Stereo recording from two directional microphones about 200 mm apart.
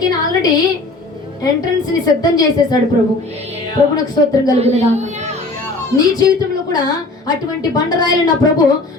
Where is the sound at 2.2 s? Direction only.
20° left (ahead or behind).